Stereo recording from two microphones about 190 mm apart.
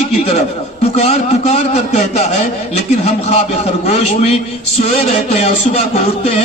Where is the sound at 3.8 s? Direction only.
35° left (ahead or behind).